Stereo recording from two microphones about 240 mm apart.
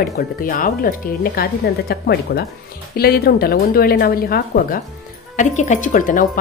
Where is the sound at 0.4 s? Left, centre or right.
Left.